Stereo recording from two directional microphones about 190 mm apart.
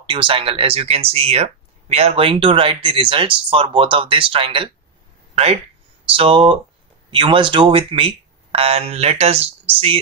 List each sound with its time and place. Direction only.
0.0 s speech: 25° right (ahead or behind)